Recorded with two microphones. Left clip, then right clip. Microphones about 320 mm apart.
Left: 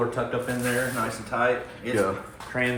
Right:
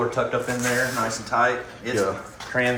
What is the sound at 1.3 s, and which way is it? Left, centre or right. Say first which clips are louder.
Speech: right 3 dB; centre.